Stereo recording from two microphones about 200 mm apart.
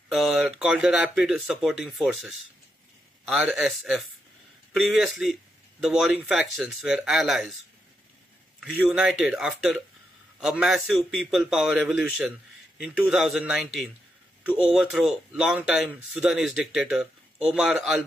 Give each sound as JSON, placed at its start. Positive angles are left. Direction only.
{"t": 0.1, "sound": "a man's voice", "side_deg": 0}
{"t": 8.5, "sound": "a man's voice", "side_deg": -5}